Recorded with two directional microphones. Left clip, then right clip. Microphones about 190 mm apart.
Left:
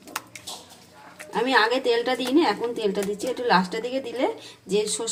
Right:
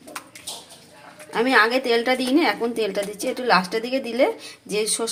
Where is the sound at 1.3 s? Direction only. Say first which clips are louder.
Right 3 dB; 30° right (ahead or behind).